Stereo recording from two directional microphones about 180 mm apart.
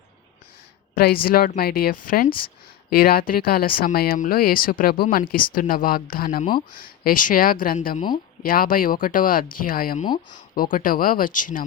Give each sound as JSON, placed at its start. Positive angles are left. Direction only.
{"t": 0.9, "sound": "speech", "side_deg": 55}